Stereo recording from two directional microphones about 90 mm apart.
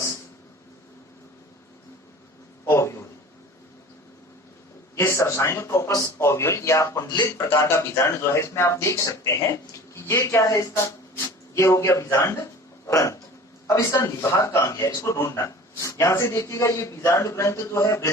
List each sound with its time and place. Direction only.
2.6 s a sound: 30° left (ahead or behind)
4.9 s a man's voice: 30° left (ahead or behind); by 7.3 s 45° left (ahead or behind)
7.3 s a man's voice: 30° left (ahead or behind)